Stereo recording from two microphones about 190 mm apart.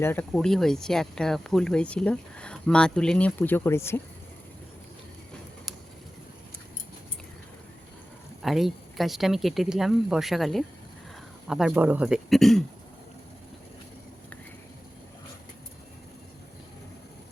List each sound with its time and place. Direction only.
0.0 s speech: 10° left (ahead or behind)
8.4 s speech: centre (ahead or behind)